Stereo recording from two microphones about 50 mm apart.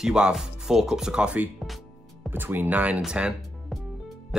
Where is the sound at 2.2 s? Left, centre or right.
Right.